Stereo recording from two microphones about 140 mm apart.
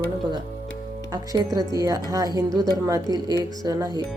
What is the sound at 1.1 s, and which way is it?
A woman's voice, 25° right (ahead or behind).